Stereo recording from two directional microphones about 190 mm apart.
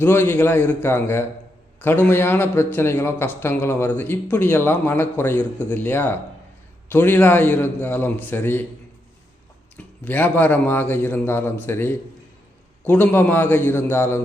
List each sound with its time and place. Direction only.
0.0 s a man's voice: 10° left (ahead or behind)
9.7 s a man's voice: 10° left (ahead or behind)